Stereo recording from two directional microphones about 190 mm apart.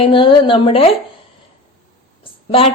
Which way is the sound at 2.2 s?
30° left (ahead or behind).